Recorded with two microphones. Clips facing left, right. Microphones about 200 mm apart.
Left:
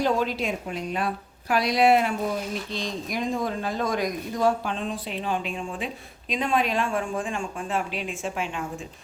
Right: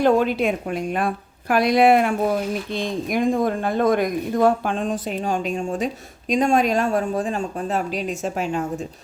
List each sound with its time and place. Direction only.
0.0 s speech: 55° right (ahead or behind); by 8.6 s 40° right (ahead or behind)